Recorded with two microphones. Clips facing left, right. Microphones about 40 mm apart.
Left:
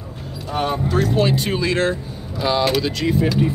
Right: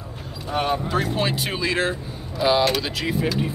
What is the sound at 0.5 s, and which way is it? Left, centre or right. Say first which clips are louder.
Speech: left 1 dB; centre.